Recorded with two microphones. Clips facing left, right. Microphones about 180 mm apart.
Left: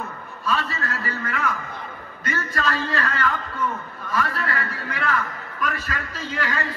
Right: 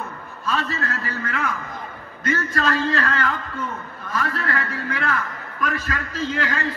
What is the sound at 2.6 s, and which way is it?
A man's voice, 45° right (ahead or behind).